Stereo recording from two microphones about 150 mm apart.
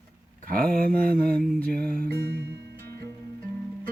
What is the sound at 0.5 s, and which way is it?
Music, 75° right (ahead or behind).